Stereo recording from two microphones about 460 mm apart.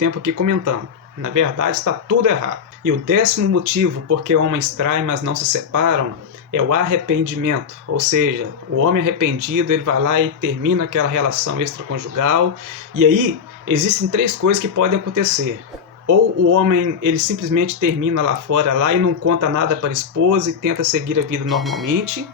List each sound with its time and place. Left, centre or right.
0.0 s speech: right
7.9 s speech: right
8.8 s speech: right
21.4 s speech: centre